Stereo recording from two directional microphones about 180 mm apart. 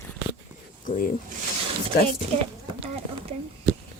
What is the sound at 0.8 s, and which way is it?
Speech, 45° left (ahead or behind).